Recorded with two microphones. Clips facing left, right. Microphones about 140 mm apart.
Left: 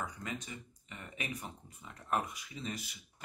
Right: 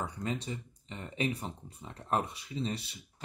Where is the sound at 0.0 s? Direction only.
30° right (ahead or behind).